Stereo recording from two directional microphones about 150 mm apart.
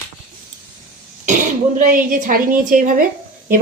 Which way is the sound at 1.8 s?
65° right (ahead or behind).